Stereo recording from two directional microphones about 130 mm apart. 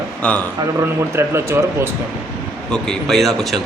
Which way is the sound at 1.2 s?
20° right (ahead or behind).